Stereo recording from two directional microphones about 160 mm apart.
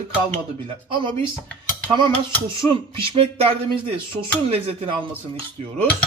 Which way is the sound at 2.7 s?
35° right (ahead or behind).